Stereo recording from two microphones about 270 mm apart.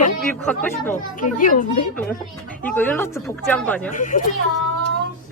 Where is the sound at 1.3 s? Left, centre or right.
Left.